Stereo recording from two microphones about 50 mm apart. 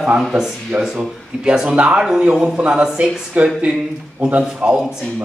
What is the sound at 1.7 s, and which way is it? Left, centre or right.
Speech, right.